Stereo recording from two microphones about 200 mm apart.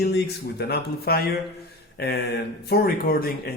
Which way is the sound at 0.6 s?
50° left (ahead or behind).